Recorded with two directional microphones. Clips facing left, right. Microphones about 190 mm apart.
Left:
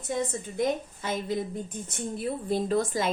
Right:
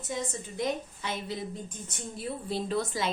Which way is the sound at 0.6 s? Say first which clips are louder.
Left 4 dB; 50° left (ahead or behind).